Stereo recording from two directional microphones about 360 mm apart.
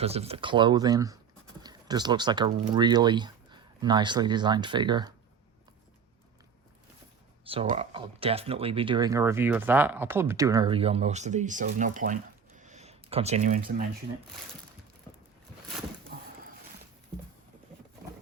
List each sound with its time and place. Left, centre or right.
0.0 s speech: centre
7.4 s speech: centre